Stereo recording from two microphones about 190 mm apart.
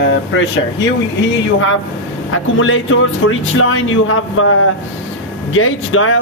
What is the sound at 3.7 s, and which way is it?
Speech, 90° left.